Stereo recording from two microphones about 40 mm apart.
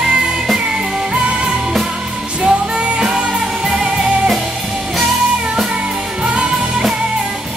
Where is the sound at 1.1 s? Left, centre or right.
Right.